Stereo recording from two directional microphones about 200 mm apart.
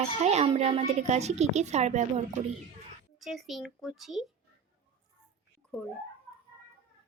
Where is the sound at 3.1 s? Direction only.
Centre (ahead or behind).